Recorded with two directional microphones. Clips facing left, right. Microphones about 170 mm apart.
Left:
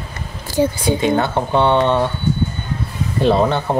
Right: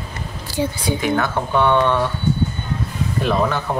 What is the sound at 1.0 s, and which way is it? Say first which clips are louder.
Speech: left 2 dB; 25° left (ahead or behind).